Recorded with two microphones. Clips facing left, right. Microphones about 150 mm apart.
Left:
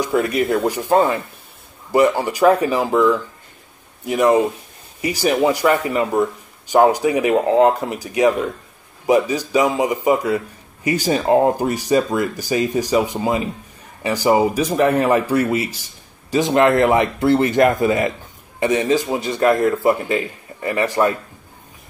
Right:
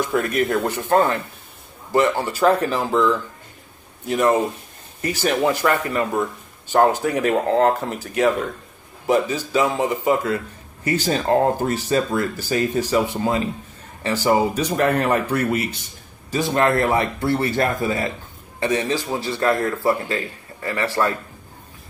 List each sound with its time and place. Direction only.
0.0 s speech: 15° left (ahead or behind)
15.5 s speech: 60° right (ahead or behind)
16.3 s speech: 20° left (ahead or behind)